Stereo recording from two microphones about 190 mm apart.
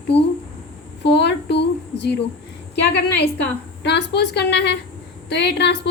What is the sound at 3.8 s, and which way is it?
A woman's voice, 60° left (ahead or behind).